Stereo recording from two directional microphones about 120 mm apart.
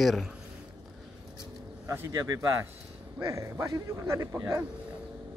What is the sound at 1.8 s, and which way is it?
Speech, 25° right (ahead or behind).